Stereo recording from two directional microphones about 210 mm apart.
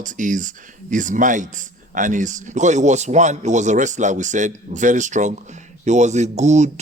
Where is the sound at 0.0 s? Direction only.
40° right (ahead or behind).